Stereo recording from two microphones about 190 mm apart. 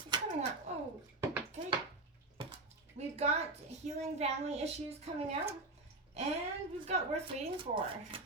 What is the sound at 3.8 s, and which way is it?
A woman's voice, 35° right (ahead or behind).